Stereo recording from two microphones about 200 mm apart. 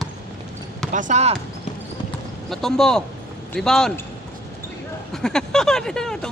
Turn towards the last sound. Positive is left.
turn(degrees=5)  # may be behind; listen again after turning